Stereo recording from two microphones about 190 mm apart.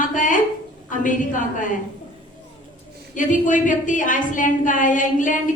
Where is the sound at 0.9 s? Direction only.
45° left (ahead or behind).